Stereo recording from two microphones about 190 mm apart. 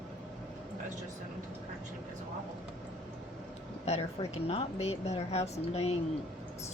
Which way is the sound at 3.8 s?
35° left (ahead or behind).